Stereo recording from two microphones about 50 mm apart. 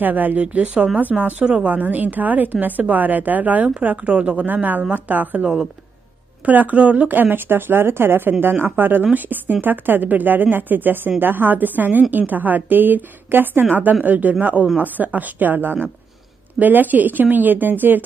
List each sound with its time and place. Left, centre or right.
0.0 s a woman's voice: right
1.4 s speech: right
1.7 s a woman's voice: right
4.6 s a woman's voice: right